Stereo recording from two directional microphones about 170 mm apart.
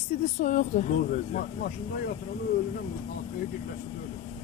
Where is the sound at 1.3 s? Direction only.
65° left (ahead or behind).